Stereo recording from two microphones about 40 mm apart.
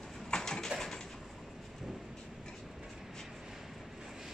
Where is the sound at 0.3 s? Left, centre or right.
Centre.